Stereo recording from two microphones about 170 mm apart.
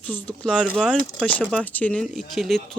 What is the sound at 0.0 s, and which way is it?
Speech, 10° left (ahead or behind).